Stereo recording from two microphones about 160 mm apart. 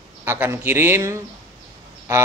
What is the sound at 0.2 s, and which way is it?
Speech, 15° right (ahead or behind).